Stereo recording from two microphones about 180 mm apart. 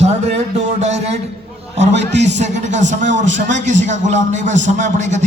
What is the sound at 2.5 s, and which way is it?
A man's voice, 40° right (ahead or behind).